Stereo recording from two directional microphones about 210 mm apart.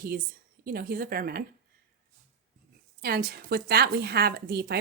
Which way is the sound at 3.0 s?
50° right (ahead or behind).